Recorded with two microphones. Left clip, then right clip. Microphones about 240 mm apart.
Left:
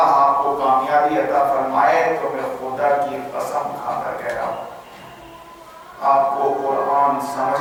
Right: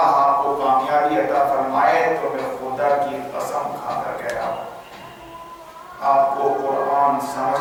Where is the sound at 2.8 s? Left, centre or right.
Centre.